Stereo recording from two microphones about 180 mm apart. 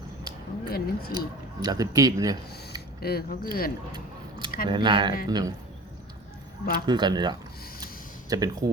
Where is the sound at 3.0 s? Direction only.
55° left (ahead or behind).